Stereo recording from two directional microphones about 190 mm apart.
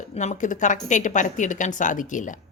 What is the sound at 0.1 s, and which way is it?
A woman's voice, 35° left (ahead or behind).